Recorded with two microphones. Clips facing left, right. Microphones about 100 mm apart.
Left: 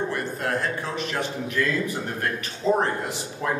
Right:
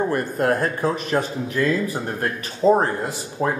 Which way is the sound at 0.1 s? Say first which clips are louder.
Right 6 dB; 45° right (ahead or behind).